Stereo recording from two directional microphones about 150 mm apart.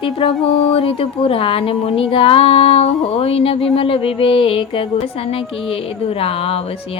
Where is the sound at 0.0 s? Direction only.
35° left (ahead or behind).